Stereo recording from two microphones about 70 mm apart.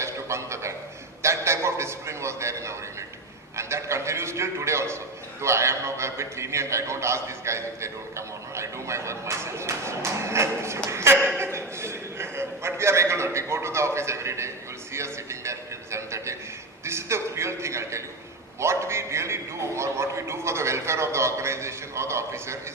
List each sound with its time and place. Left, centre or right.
0.0 s a sound: right
1.2 s a man's voice: right
10.8 s chuckle: right
11.5 s a sound: right
14.9 s music: right
16.8 s a man's voice: right